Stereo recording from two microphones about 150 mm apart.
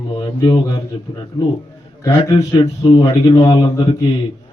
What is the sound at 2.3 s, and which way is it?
Speech, 30° left (ahead or behind).